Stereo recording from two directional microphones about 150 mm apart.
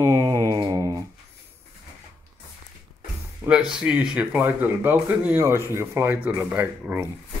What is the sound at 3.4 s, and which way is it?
Speech, 5° right (ahead or behind).